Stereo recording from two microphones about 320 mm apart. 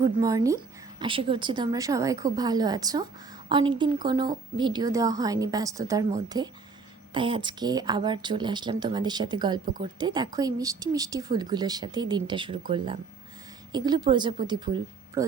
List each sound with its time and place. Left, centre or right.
0.0 s speech: centre
9.6 s a woman's voice: right
10.0 s speech: centre